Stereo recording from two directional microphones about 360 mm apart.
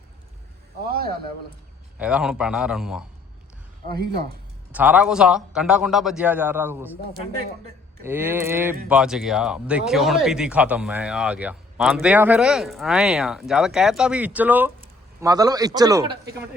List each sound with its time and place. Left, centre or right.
0.9 s speech: right
2.0 s speech: centre
4.0 s speech: right
4.7 s speech: centre
8.0 s a man's voice: centre